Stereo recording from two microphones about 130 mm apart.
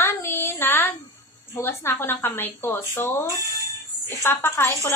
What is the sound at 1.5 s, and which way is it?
A woman's voice, 20° left (ahead or behind).